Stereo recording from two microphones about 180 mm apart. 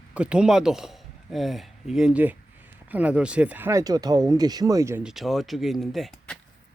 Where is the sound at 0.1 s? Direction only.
5° right (ahead or behind).